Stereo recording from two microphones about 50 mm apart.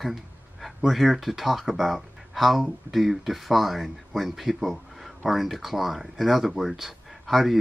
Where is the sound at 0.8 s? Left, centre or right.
Centre.